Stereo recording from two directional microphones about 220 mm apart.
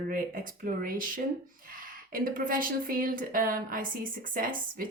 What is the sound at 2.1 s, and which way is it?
Speech, 40° right (ahead or behind).